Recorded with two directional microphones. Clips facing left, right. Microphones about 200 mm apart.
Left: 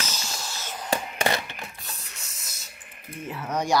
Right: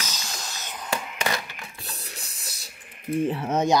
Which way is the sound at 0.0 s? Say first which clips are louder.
Left 1 dB; 15° right (ahead or behind).